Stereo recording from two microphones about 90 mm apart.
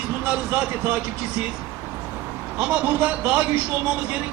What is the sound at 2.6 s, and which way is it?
Speech, 15° right (ahead or behind).